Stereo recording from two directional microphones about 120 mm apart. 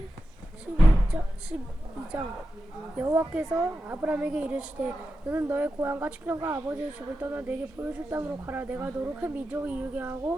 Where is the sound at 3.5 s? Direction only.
15° right (ahead or behind).